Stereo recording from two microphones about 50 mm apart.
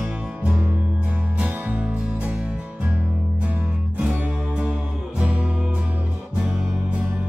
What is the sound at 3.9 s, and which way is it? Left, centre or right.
Music, right.